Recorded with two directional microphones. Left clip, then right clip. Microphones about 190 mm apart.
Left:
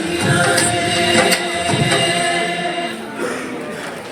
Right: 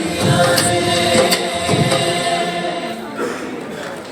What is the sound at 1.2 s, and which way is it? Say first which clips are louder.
Printer: even; 35° right (ahead or behind).